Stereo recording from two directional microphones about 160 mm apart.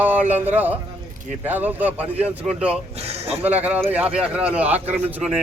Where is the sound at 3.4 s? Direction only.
10° right (ahead or behind).